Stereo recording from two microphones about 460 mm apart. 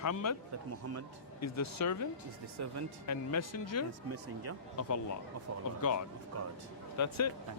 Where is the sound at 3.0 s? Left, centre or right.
Left.